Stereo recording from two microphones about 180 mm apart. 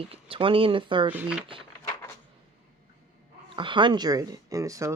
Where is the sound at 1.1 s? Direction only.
5° right (ahead or behind).